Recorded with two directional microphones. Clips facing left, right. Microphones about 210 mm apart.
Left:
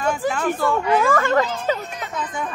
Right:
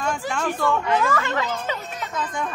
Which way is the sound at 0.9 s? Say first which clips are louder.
Left 5 dB; 50° left (ahead or behind).